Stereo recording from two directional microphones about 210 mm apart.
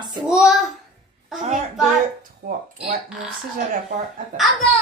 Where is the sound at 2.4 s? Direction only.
45° right (ahead or behind).